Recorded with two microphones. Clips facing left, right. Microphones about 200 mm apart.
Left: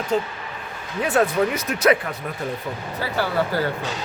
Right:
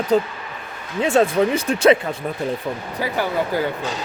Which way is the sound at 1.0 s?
25° right (ahead or behind).